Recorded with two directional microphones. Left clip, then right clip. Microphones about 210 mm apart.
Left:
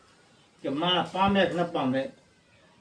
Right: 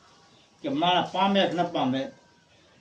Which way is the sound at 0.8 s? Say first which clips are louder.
Right 2 dB; 15° left (ahead or behind).